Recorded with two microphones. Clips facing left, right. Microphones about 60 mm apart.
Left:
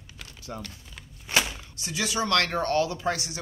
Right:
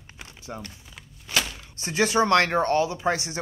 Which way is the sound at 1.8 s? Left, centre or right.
Right.